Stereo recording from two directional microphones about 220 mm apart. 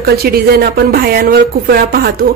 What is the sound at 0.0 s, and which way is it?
A woman's voice, 45° right (ahead or behind).